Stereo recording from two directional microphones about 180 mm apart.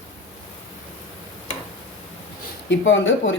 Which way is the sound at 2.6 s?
90° left.